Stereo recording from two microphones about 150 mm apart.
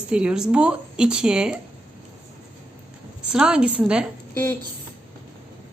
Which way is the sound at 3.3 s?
5° right (ahead or behind).